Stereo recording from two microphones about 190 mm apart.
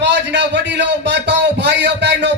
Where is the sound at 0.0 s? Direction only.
70° right (ahead or behind).